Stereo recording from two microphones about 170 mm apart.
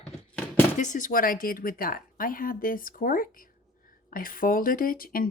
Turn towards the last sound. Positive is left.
turn(degrees=55)  # may be behind; listen again after turning